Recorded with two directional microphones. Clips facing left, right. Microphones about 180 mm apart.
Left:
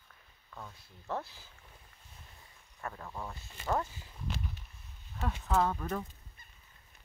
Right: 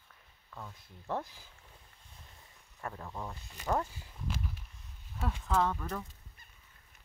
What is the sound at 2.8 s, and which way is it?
Speech, 5° right (ahead or behind).